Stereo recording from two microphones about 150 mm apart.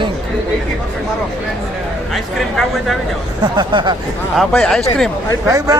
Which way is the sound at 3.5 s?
30° right (ahead or behind).